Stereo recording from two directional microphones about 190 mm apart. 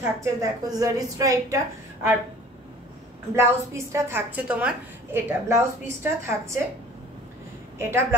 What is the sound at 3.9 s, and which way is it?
A woman's voice, 10° right (ahead or behind).